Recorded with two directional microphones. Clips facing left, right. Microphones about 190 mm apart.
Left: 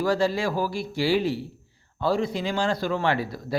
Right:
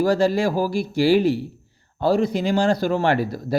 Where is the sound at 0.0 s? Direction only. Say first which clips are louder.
Right 5 dB; 40° right (ahead or behind).